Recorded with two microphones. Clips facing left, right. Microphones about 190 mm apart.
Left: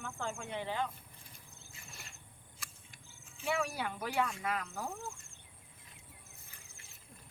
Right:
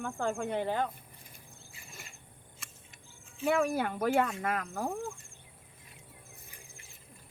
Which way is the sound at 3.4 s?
50° right (ahead or behind).